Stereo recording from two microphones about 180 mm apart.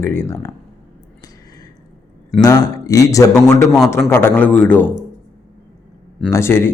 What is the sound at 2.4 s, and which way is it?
Speech, 20° left (ahead or behind).